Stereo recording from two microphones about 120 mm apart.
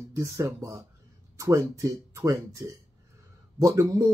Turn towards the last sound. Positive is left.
turn(degrees=-25)  # may be behind; listen again after turning